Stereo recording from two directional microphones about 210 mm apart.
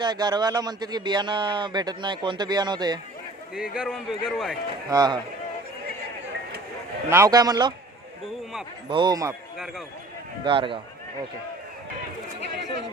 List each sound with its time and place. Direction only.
0.0 s speech: 20° right (ahead or behind)
3.5 s a man's voice: 5° right (ahead or behind)
4.9 s speech: 20° right (ahead or behind)
7.1 s a man's voice: 15° right (ahead or behind)
8.9 s speech: 20° right (ahead or behind)
10.4 s speech: 25° right (ahead or behind)
12.4 s chatter: 55° right (ahead or behind)